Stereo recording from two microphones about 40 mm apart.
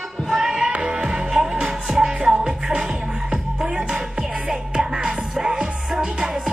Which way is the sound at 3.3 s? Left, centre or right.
Centre.